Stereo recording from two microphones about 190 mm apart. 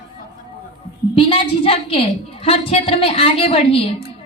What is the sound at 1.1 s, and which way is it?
A woman's voice, 30° left (ahead or behind).